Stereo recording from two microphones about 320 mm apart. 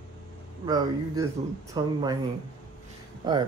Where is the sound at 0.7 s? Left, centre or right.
Centre.